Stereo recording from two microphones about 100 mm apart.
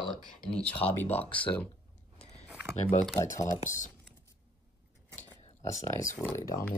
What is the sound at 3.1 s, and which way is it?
Speech, 30° left (ahead or behind).